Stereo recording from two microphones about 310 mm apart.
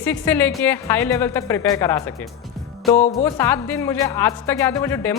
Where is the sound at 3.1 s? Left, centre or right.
Centre.